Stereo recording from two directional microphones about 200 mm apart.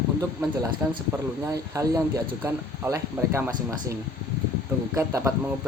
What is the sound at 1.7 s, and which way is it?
Speech, 15° right (ahead or behind).